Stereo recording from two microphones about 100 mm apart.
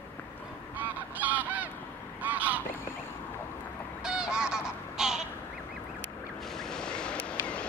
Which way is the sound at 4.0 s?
10° right (ahead or behind).